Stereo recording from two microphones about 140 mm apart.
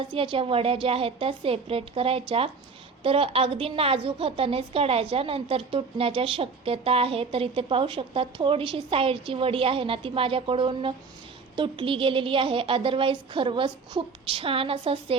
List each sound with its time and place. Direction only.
0.1 s a woman's voice: 40° right (ahead or behind)